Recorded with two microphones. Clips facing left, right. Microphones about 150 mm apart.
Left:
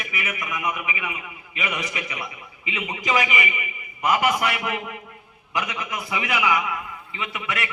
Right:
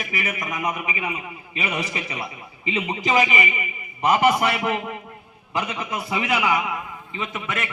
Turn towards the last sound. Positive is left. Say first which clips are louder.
# right 1 dB
turn(degrees=-30)  # may be behind; listen again after turning